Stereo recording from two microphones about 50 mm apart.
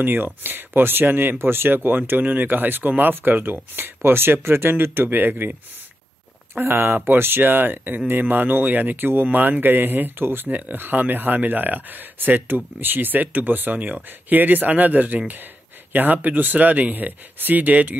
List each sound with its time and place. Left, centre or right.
0.0 s speech: right
6.5 s speech: right